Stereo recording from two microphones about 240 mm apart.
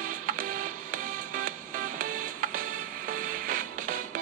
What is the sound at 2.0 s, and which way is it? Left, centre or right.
Music, right.